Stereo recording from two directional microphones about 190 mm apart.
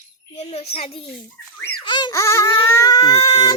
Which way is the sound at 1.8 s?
25° left (ahead or behind).